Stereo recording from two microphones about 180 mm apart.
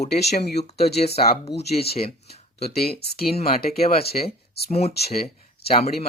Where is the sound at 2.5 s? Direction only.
60° left (ahead or behind).